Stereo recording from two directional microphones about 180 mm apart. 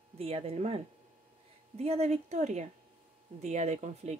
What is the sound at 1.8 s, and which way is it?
A woman's voice, 35° right (ahead or behind).